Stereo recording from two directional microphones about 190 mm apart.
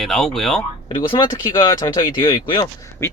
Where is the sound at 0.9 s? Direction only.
25° left (ahead or behind).